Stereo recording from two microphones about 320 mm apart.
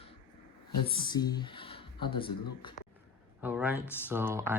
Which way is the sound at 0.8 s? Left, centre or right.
Centre.